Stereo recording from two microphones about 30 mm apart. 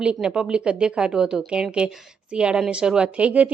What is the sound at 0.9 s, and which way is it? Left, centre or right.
A woman's voice, right.